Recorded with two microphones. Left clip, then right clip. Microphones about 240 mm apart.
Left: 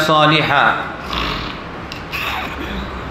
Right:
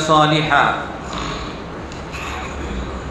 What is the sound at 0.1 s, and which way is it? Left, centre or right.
Speech, left.